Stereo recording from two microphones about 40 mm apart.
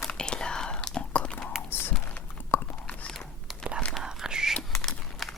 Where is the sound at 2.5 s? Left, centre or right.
Left.